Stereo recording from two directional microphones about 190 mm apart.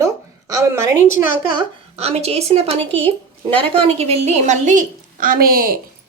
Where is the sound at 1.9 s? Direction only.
35° right (ahead or behind); by 5.8 s 50° right (ahead or behind).